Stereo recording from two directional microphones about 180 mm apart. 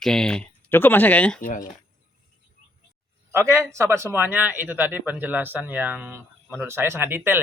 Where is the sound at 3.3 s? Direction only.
15° right (ahead or behind).